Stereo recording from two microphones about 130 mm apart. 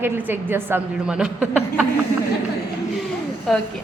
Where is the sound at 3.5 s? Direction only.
Centre (ahead or behind).